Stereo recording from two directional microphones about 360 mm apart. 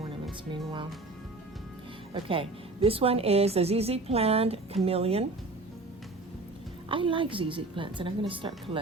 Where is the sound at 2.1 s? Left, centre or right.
Centre.